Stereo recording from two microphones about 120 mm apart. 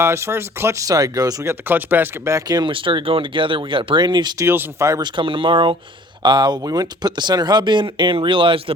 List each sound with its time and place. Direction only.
0.0 s speech: 20° right (ahead or behind)
1.6 s speech: 15° right (ahead or behind); by 4.4 s 35° right (ahead or behind)
4.4 s speech: 20° right (ahead or behind)
5.0 s speech: 45° right (ahead or behind)